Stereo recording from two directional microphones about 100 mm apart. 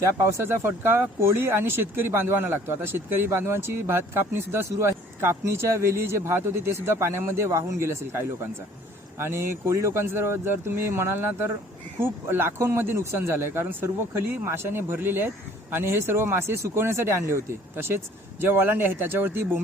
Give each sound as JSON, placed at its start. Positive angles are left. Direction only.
{"t": 0.0, "sound": "speech", "side_deg": -30}